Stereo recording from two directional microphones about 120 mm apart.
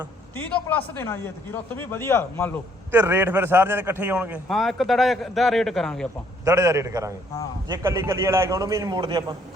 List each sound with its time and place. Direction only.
0.3 s a man's voice: 15° left (ahead or behind)
2.9 s a man's voice: 20° right (ahead or behind)
4.4 s a man's voice: centre (ahead or behind)
6.4 s a man's voice: 25° right (ahead or behind)